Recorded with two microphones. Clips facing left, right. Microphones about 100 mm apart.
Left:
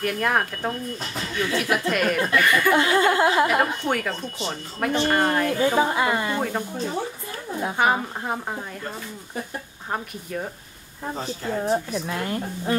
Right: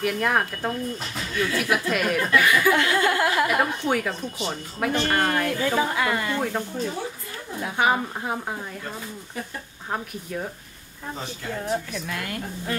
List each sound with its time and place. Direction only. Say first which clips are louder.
0.0 s speech: even; centre (ahead or behind)
1.3 s speech: even; 25° left (ahead or behind)
1.6 s speech: left 2 dB; centre (ahead or behind)
2.7 s a woman's voice: left 2 dB; 20° left (ahead or behind)
3.8 s speech: right 1 dB; centre (ahead or behind)
5.5 s a woman's voice: left 3 dB; 20° left (ahead or behind)
7.7 s speech: even; centre (ahead or behind)
9.8 s speech: even; 5° left (ahead or behind)
11.4 s a woman's voice: left 4 dB; 30° left (ahead or behind)